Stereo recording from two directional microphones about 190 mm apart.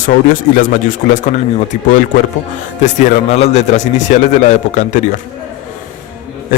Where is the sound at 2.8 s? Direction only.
35° left (ahead or behind).